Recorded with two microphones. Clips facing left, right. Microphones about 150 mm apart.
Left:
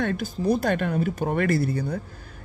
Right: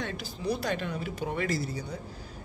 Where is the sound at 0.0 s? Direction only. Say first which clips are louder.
Left 8 dB; 50° left (ahead or behind).